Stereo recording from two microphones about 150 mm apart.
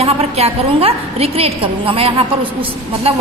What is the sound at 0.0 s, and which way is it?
A woman's voice, 40° right (ahead or behind).